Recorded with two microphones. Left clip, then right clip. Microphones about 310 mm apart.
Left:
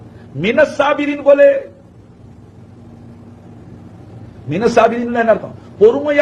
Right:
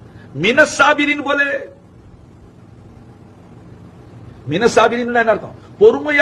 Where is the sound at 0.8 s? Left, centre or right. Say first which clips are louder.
Left 3 dB; right.